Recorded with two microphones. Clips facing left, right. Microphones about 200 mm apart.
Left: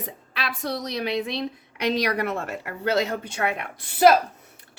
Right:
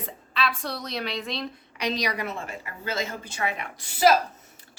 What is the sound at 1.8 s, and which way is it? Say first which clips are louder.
A woman's voice: left 5 dB; 55° left (ahead or behind).